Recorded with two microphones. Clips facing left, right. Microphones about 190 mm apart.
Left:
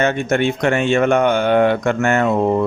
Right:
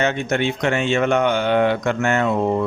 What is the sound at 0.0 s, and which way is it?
Speech, 50° left (ahead or behind).